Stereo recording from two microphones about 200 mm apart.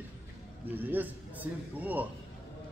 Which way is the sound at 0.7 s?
10° right (ahead or behind).